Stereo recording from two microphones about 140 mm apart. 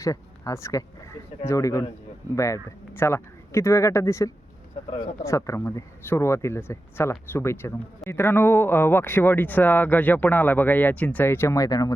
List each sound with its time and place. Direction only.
0.0 s speech: 25° left (ahead or behind)